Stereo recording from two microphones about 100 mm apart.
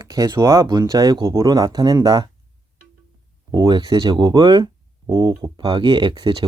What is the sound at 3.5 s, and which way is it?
Speech, 45° right (ahead or behind).